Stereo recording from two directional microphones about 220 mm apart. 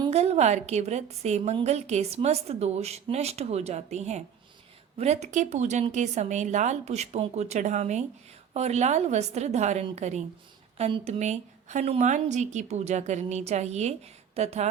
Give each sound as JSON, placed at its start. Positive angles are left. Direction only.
{"t": 0.0, "sound": "a woman's voice", "side_deg": -30}